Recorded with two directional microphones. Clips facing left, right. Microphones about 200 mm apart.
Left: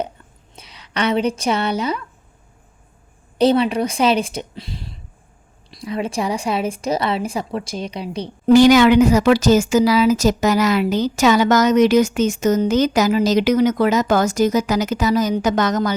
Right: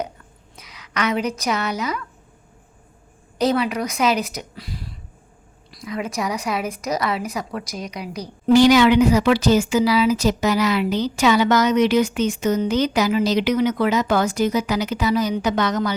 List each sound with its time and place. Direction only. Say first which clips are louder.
0.5 s speech: left 2 dB; 30° left (ahead or behind)
3.3 s speech: left 5 dB; 30° left (ahead or behind)
8.4 s speech: left 3 dB; 50° left (ahead or behind)